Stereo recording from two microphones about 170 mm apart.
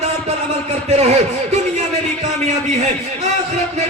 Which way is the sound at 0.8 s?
40° right (ahead or behind).